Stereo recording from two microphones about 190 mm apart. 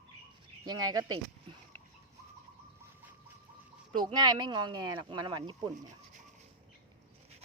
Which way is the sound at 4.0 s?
20° right (ahead or behind).